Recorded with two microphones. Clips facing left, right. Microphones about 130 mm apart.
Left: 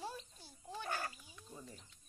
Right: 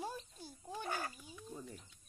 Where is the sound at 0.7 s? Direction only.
15° right (ahead or behind).